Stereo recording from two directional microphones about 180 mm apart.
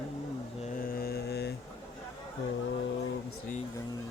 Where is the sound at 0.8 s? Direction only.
55° left (ahead or behind).